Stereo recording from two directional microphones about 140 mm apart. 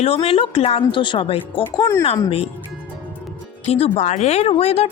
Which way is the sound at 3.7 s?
45° left (ahead or behind).